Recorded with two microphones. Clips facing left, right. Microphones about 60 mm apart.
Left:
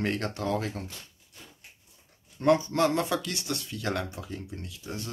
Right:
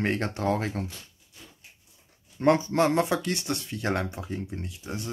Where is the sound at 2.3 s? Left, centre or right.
Right.